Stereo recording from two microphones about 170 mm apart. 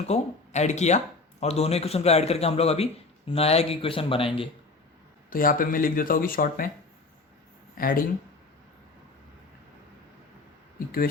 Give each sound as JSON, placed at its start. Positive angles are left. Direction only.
{"t": 0.1, "sound": "speech", "side_deg": 40}
{"t": 5.3, "sound": "speech", "side_deg": 55}
{"t": 7.8, "sound": "speech", "side_deg": 55}
{"t": 10.8, "sound": "speech", "side_deg": 60}